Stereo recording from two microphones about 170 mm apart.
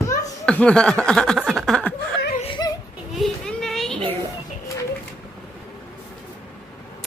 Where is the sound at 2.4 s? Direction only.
25° left (ahead or behind).